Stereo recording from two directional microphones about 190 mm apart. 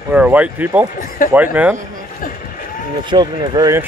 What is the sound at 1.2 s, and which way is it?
Speech, 50° left (ahead or behind).